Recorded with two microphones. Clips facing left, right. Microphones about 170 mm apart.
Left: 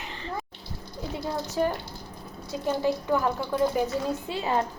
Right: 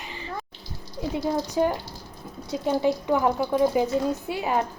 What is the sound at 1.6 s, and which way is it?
Speech, 20° right (ahead or behind).